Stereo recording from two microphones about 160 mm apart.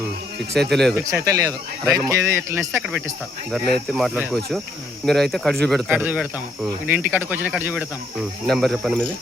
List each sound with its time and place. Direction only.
0.7 s speech: centre (ahead or behind)
1.1 s speech: 20° right (ahead or behind)
3.5 s speech: centre (ahead or behind)
5.9 s speech: 10° right (ahead or behind)